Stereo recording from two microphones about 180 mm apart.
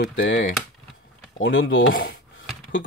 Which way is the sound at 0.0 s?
90° left.